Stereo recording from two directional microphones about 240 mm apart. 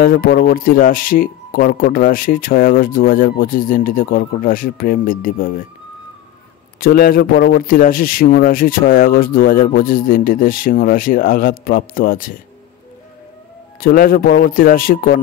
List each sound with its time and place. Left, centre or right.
0.0 s speech: left
6.8 s speech: left
13.7 s speech: left